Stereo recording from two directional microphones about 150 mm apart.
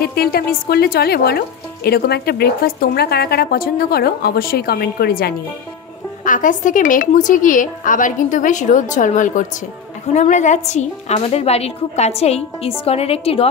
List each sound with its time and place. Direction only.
0.0 s speech: 90° left
6.2 s a woman's voice: 60° left (ahead or behind); by 13.5 s 40° left (ahead or behind)